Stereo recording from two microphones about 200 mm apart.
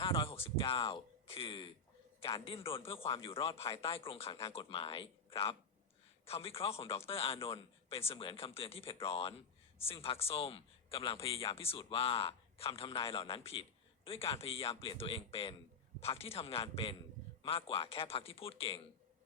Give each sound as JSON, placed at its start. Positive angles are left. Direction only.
{"t": 0.0, "sound": "a sound", "side_deg": 25}
{"t": 2.2, "sound": "a man's voice", "side_deg": 25}
{"t": 6.2, "sound": "a man's voice", "side_deg": 30}